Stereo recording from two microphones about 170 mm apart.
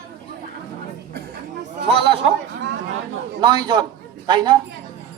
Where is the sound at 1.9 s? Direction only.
35° right (ahead or behind).